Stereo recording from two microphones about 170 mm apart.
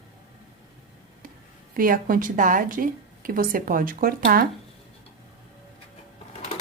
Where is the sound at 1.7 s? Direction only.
55° right (ahead or behind).